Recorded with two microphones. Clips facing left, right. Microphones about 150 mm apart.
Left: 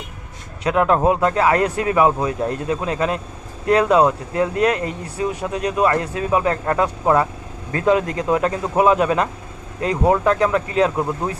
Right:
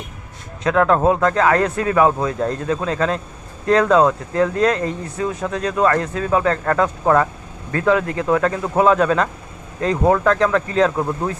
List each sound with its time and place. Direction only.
0.6 s speech: 15° left (ahead or behind)